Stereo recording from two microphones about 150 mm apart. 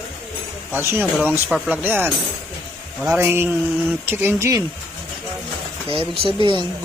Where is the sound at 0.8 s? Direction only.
15° right (ahead or behind).